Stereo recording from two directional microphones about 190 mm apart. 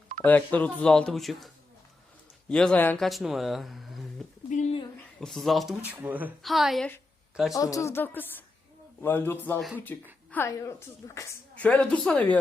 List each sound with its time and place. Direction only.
0.3 s speech: 10° left (ahead or behind)
2.5 s speech: 5° left (ahead or behind)
4.4 s bird: 40° left (ahead or behind)
5.2 s speech: centre (ahead or behind)
7.5 s speech: 15° left (ahead or behind)
9.6 s speech: centre (ahead or behind)
10.3 s speech: 15° left (ahead or behind)